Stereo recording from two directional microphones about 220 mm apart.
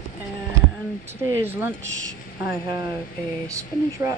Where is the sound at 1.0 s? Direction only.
10° right (ahead or behind).